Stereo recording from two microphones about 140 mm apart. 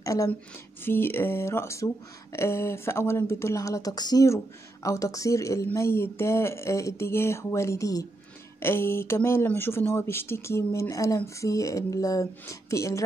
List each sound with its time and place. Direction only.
0.0 s a woman's voice: 25° left (ahead or behind)